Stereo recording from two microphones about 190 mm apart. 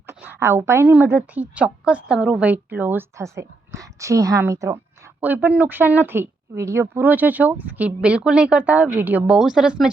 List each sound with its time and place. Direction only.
0.1 s a woman's voice: 10° right (ahead or behind)